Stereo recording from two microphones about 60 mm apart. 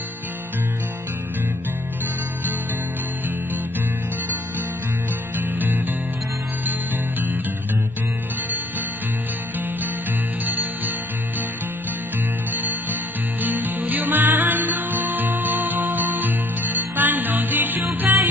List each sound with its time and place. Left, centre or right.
5.4 s music: right
10.4 s music: right
13.4 s music: right